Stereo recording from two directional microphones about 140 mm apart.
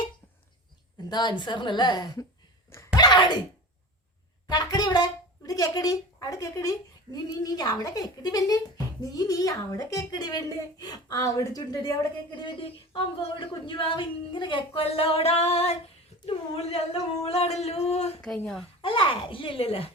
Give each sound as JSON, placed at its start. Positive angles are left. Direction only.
{"t": 1.1, "sound": "speech", "side_deg": 30}
{"t": 2.7, "sound": "a sound", "side_deg": 25}
{"t": 4.4, "sound": "speech", "side_deg": 30}
{"t": 16.2, "sound": "a sound", "side_deg": 45}
{"t": 18.2, "sound": "speech", "side_deg": 5}
{"t": 18.8, "sound": "speech", "side_deg": 40}